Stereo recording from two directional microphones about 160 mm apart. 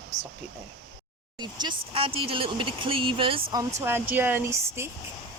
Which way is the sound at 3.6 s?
15° right (ahead or behind).